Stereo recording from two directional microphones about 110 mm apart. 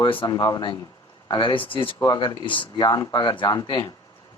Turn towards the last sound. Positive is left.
turn(degrees=45)  # may be behind; listen again after turning